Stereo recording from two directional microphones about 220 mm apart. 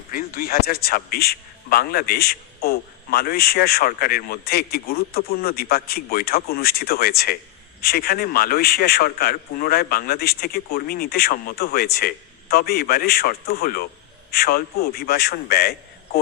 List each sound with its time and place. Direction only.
0.1 s a man's voice: 40° left (ahead or behind)